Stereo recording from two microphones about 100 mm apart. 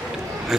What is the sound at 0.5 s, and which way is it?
Speech, 5° right (ahead or behind).